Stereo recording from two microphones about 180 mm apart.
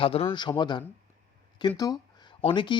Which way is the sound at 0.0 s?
30° left (ahead or behind).